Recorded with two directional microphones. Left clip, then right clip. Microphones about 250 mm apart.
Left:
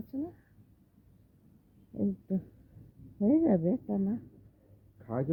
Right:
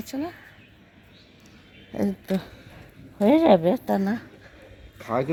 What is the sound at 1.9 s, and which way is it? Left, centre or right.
Speech, right.